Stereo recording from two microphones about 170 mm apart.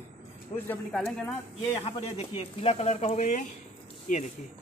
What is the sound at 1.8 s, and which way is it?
Speech, 35° left (ahead or behind).